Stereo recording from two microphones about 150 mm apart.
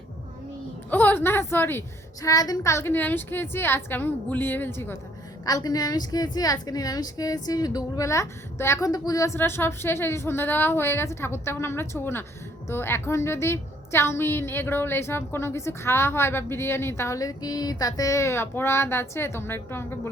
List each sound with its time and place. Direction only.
0.9 s a woman's voice: 10° left (ahead or behind)